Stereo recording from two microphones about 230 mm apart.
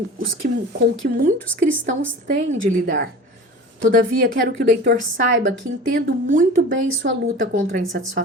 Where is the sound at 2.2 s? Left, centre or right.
Right.